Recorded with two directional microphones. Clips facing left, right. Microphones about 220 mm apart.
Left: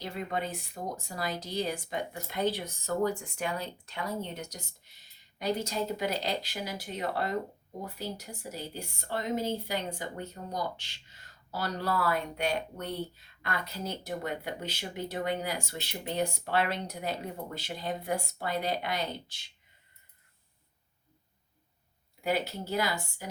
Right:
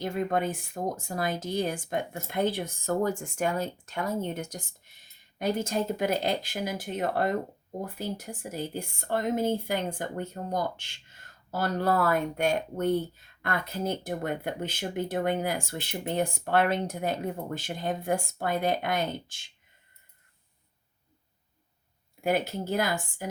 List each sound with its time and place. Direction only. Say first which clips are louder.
0.0 s a woman's voice: right 6 dB; 50° right (ahead or behind)
22.2 s a woman's voice: right 4 dB; 50° right (ahead or behind)